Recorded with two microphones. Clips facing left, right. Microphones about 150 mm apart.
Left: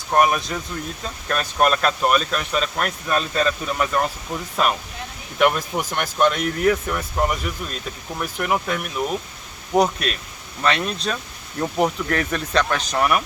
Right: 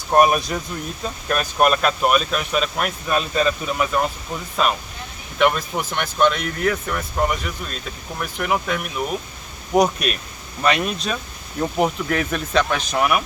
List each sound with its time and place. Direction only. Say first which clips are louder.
0.1 s speech: right 3 dB; 20° right (ahead or behind)
1.0 s speech: right 3 dB; 10° right (ahead or behind)
9.7 s speech: right 1 dB; 15° right (ahead or behind)